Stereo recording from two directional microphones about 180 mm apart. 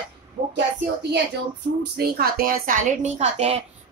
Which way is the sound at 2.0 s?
60° right (ahead or behind).